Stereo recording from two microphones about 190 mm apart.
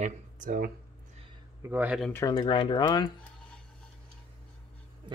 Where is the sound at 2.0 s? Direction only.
15° left (ahead or behind).